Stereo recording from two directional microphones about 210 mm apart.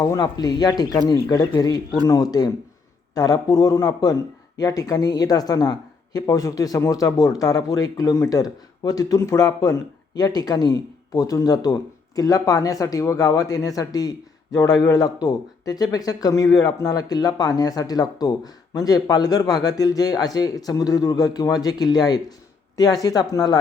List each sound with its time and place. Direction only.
0.0 s speech: 15° left (ahead or behind)